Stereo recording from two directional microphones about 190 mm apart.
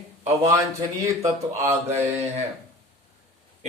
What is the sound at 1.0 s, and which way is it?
Speech, 15° right (ahead or behind).